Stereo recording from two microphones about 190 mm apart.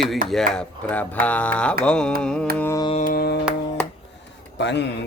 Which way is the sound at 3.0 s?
50° left (ahead or behind).